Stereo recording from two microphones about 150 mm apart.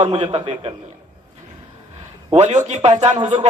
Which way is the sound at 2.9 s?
50° right (ahead or behind).